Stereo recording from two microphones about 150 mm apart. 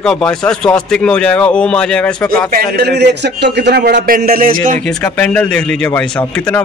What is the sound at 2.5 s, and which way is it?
A man's voice, 90° right.